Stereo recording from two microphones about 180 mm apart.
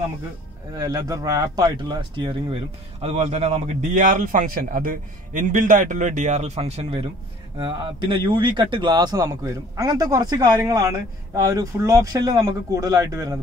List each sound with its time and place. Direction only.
0.7 s speech: 20° right (ahead or behind)